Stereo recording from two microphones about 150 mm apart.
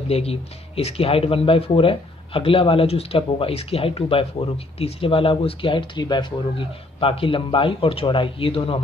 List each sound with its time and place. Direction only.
0.1 s speech: 40° left (ahead or behind)